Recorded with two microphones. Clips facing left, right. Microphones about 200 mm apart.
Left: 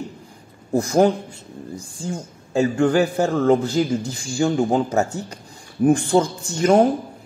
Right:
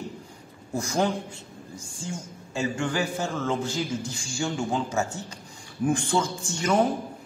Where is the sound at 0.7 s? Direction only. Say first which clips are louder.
Left 9 dB; 35° left (ahead or behind).